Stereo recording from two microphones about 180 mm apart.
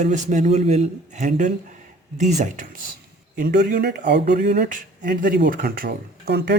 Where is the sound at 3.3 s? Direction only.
55° right (ahead or behind).